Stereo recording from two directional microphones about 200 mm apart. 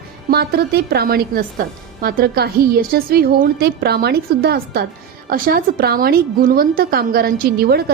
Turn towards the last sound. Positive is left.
turn(degrees=-50)  # may be behind; listen again after turning